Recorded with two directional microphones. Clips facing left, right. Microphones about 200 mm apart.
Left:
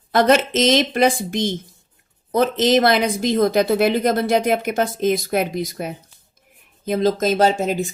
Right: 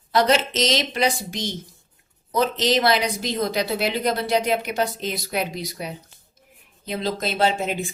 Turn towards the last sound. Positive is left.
turn(degrees=40)  # may be behind; listen again after turning